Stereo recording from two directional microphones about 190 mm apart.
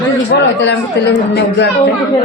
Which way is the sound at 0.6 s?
65° left (ahead or behind).